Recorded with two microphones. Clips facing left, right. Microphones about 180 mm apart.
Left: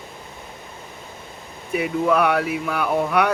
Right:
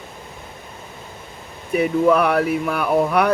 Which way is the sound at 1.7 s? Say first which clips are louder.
Right 4 dB; 45° right (ahead or behind).